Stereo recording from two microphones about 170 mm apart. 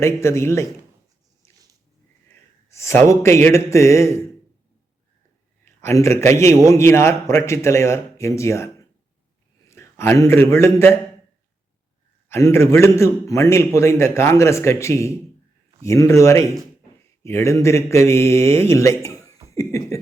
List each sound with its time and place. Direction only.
0.0 s a man's voice: 15° left (ahead or behind)
2.6 s a man's voice: 15° left (ahead or behind)
5.6 s a man's voice: 15° left (ahead or behind)
12.3 s a man's voice: 15° left (ahead or behind)